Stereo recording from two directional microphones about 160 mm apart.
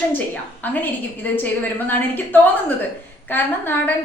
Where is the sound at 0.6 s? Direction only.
10° left (ahead or behind).